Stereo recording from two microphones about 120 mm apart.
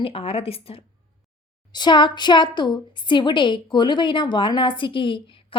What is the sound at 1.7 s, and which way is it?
A woman's voice, 40° left (ahead or behind).